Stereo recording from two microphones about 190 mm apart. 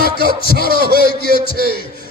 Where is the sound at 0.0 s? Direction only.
55° right (ahead or behind).